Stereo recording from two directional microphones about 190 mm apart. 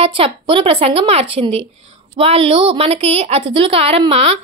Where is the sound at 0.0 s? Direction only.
30° right (ahead or behind).